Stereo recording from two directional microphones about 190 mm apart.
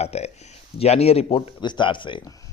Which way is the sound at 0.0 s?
35° left (ahead or behind).